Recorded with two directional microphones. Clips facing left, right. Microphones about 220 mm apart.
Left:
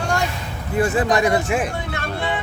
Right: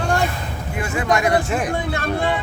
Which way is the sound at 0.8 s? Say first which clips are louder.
Left 2 dB; 35° left (ahead or behind).